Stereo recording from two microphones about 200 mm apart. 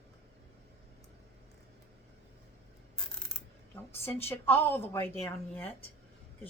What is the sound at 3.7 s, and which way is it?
Speech, 10° left (ahead or behind).